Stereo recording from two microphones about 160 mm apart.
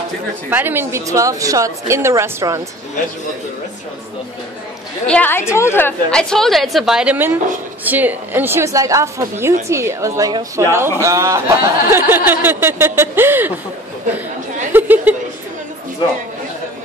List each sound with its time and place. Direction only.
0.5 s a woman's voice: 10° right (ahead or behind)
5.0 s a woman's voice: 10° left (ahead or behind); by 13.5 s 15° right (ahead or behind)
14.7 s chuckle: 10° right (ahead or behind)